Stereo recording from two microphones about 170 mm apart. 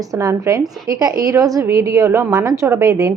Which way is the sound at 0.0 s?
20° right (ahead or behind).